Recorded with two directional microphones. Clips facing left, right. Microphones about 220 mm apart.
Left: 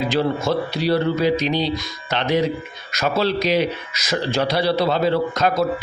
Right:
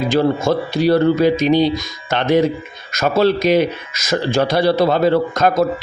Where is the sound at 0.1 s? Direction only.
45° right (ahead or behind).